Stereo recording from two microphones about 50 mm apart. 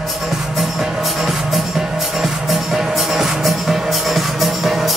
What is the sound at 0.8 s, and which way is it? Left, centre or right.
Music, centre.